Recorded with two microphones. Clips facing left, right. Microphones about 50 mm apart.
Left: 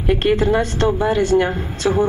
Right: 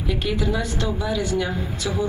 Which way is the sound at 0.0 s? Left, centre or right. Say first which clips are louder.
Left 8 dB; left.